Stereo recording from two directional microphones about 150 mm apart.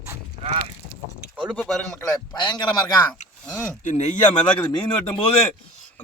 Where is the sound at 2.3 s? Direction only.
30° left (ahead or behind).